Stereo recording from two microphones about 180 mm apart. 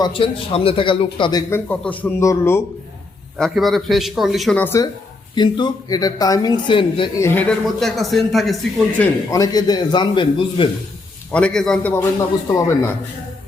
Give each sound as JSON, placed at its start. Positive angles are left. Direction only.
{"t": 0.0, "sound": "a man's voice", "side_deg": 30}
{"t": 3.3, "sound": "a man's voice", "side_deg": 0}
{"t": 5.3, "sound": "a woman's voice", "side_deg": 25}
{"t": 7.2, "sound": "a man's voice", "side_deg": 10}
{"t": 7.6, "sound": "a man's voice", "side_deg": 0}
{"t": 9.0, "sound": "a woman's voice", "side_deg": 20}
{"t": 11.3, "sound": "a man's voice", "side_deg": 5}